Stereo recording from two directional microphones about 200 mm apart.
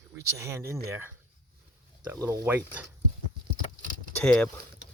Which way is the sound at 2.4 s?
10° right (ahead or behind).